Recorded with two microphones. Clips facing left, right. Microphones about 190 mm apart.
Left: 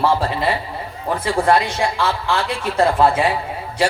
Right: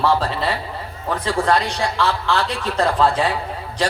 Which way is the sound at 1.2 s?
15° left (ahead or behind).